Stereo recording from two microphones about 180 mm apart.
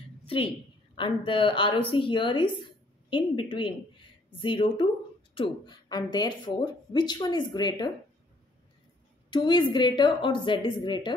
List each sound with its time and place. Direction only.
0.9 s speech: 30° left (ahead or behind)
9.3 s speech: 25° left (ahead or behind)